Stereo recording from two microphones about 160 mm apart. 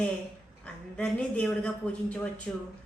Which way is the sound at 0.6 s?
5° left (ahead or behind).